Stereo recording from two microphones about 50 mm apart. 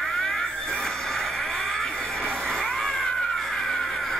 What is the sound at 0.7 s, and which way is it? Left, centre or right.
Music, centre.